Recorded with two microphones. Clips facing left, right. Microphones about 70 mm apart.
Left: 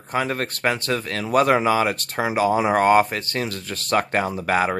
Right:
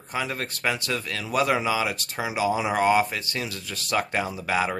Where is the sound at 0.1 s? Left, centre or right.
Left.